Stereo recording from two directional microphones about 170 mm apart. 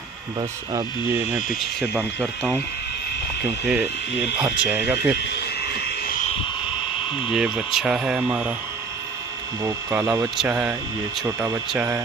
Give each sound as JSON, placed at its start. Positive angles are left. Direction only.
{"t": 1.8, "sound": "speech", "side_deg": 0}
{"t": 3.6, "sound": "speech", "side_deg": -10}
{"t": 5.6, "sound": "a sound", "side_deg": 70}
{"t": 7.2, "sound": "speech", "side_deg": -5}
{"t": 9.6, "sound": "speech", "side_deg": -15}
{"t": 11.2, "sound": "speech", "side_deg": -15}